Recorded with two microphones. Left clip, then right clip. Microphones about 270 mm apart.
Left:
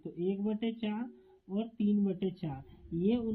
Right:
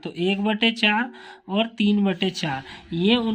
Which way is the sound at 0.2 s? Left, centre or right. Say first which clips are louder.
Right 13 dB; right.